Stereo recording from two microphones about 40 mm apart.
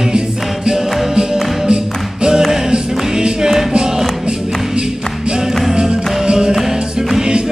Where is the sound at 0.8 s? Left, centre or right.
Centre.